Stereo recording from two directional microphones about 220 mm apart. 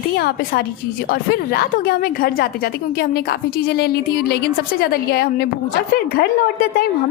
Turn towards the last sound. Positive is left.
turn(degrees=45)  # may be behind; listen again after turning